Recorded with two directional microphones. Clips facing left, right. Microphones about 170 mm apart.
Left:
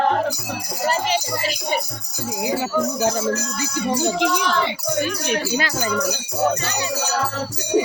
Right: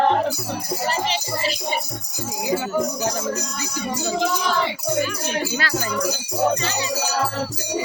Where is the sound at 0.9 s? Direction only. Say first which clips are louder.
Left 5 dB; 45° left (ahead or behind).